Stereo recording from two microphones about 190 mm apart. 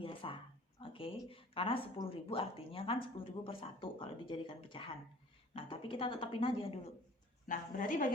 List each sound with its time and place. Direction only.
0.0 s a sound: 25° left (ahead or behind)
0.8 s a woman's voice: 30° left (ahead or behind)
7.4 s a woman's voice: 45° left (ahead or behind)